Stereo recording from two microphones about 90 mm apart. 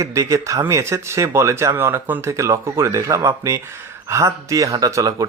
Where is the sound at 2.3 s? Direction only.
35° right (ahead or behind).